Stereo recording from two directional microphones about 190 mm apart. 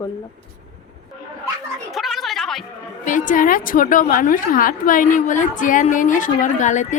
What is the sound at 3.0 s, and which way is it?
A woman's voice, 45° left (ahead or behind).